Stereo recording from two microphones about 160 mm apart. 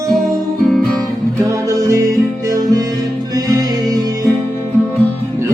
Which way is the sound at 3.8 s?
25° right (ahead or behind).